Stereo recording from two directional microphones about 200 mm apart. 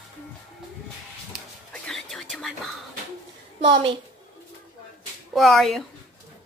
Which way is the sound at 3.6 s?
25° right (ahead or behind).